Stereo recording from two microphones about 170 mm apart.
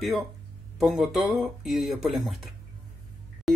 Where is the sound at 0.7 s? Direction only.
Centre (ahead or behind).